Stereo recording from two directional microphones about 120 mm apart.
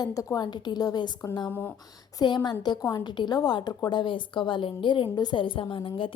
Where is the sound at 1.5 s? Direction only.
15° left (ahead or behind).